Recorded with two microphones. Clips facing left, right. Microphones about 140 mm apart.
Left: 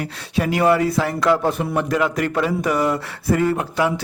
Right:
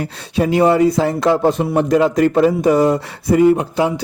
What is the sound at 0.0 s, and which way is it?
Speech, 30° right (ahead or behind).